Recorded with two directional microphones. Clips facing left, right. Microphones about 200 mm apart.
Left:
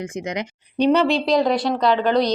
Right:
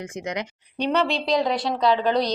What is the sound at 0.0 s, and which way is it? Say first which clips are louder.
Speech: left 3 dB; 15° left (ahead or behind).